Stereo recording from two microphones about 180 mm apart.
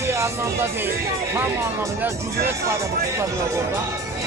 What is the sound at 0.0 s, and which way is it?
Speech, 15° right (ahead or behind).